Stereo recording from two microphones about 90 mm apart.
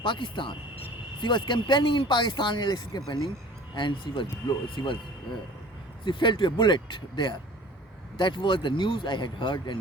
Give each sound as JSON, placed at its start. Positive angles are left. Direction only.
{"t": 0.0, "sound": "speech", "side_deg": 65}
{"t": 6.1, "sound": "speech", "side_deg": 70}